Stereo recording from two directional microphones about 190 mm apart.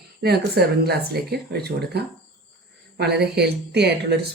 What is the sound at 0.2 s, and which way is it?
Speech, 55° right (ahead or behind).